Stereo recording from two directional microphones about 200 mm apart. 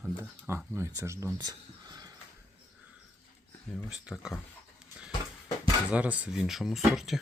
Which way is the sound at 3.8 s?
Centre (ahead or behind).